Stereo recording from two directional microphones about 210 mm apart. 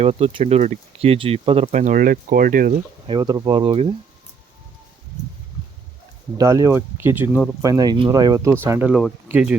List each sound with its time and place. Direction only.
0.0 s speech: 30° right (ahead or behind)
3.1 s speech: 20° right (ahead or behind)
6.3 s speech: 15° right (ahead or behind)